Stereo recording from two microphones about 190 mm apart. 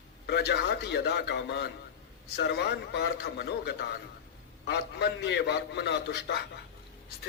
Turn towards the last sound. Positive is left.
turn(degrees=60)  # may be behind; listen again after turning